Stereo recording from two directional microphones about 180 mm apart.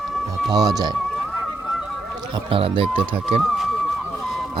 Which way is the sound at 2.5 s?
30° right (ahead or behind).